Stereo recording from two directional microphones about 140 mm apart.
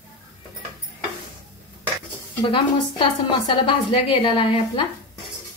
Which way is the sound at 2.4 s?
35° left (ahead or behind).